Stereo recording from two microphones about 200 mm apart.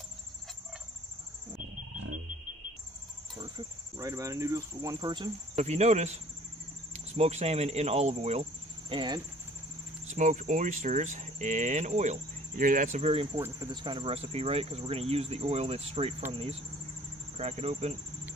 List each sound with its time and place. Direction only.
3.9 s speech: 15° right (ahead or behind)
5.5 s speech: 35° right (ahead or behind)
10.1 s speech: 40° right (ahead or behind)
17.3 s speech: 30° right (ahead or behind)